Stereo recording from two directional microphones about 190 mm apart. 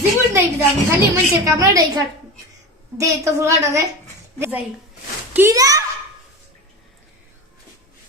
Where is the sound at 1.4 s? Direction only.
15° right (ahead or behind).